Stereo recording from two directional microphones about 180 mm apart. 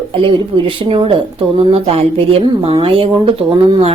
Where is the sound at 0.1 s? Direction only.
30° right (ahead or behind).